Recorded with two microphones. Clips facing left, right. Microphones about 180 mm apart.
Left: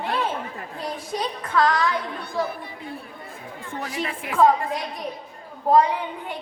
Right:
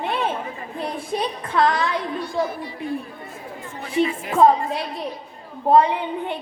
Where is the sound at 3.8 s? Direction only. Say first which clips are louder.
Right 9 dB; 25° right (ahead or behind).